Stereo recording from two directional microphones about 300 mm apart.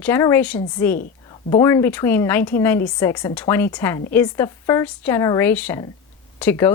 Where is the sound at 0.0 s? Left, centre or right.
Centre.